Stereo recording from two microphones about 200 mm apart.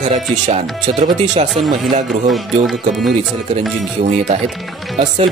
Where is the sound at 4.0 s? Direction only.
40° right (ahead or behind).